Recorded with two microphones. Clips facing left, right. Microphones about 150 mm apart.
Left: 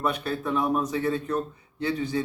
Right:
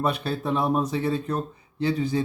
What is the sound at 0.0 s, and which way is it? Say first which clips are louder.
A man's voice: right 2 dB; 30° right (ahead or behind).